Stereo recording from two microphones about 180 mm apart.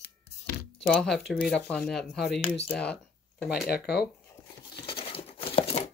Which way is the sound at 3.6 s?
60° left (ahead or behind).